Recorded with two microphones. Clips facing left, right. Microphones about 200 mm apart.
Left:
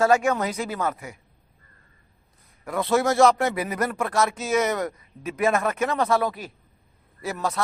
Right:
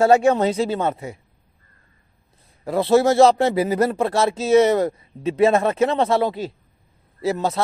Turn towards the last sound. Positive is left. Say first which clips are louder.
# right 6 dB
turn(degrees=-25)  # may be behind; listen again after turning